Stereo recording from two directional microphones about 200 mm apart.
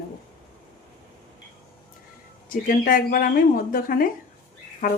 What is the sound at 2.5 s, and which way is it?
Speech, 45° left (ahead or behind).